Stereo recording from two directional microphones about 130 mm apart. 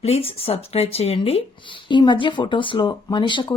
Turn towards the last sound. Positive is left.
turn(degrees=35)  # may be behind; listen again after turning